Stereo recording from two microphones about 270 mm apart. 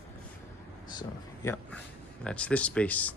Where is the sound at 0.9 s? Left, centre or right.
Centre.